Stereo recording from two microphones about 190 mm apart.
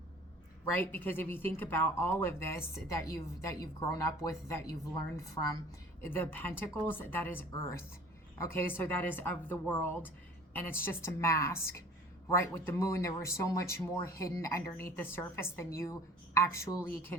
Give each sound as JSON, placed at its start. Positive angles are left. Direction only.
{"t": 0.7, "sound": "speech", "side_deg": 10}